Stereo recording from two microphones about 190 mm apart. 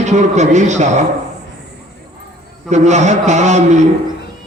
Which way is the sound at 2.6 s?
35° right (ahead or behind).